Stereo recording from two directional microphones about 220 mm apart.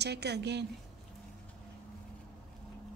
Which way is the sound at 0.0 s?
50° right (ahead or behind).